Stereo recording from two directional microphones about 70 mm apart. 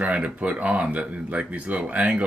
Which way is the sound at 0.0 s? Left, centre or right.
Right.